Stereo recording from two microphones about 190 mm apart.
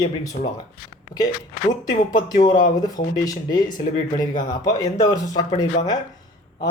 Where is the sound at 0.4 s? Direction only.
40° left (ahead or behind).